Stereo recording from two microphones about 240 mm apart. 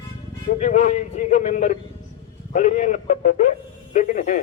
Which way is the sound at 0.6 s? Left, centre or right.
Left.